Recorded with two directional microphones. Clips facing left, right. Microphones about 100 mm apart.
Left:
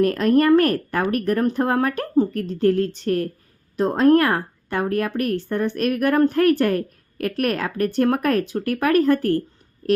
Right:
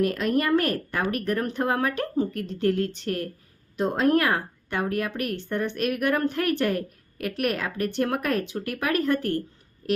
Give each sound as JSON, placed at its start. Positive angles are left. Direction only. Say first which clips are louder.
{"t": 0.0, "sound": "a woman's voice", "louder": "left 7 dB", "side_deg": 40}